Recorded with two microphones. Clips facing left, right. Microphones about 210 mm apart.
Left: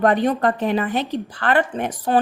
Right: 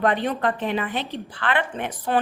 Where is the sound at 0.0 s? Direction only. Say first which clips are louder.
Left 5 dB; 45° left (ahead or behind).